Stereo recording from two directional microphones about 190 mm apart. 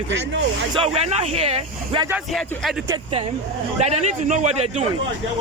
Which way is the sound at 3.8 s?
35° right (ahead or behind).